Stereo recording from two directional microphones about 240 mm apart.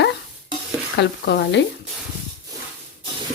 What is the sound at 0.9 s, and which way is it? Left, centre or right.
Speech, left.